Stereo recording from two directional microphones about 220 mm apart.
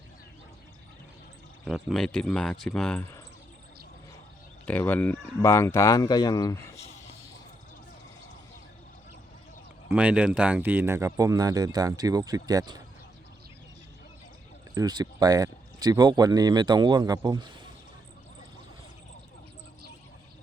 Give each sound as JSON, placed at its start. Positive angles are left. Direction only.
{"t": 1.6, "sound": "speech", "side_deg": 0}
{"t": 4.6, "sound": "speech", "side_deg": 5}
{"t": 9.9, "sound": "speech", "side_deg": -5}
{"t": 14.8, "sound": "speech", "side_deg": -15}